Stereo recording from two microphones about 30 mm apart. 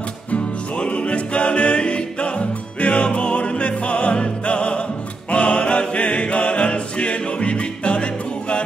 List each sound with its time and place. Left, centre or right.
0.3 s music: left